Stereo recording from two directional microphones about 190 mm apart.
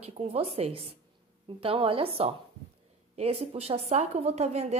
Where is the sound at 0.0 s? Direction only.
30° right (ahead or behind).